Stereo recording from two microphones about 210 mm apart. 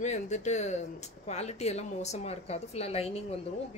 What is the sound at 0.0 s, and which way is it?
A woman's voice, 35° left (ahead or behind).